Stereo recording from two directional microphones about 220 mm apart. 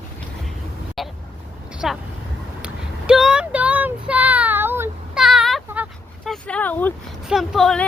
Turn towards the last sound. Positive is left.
turn(degrees=0)  # may be behind; listen again after turning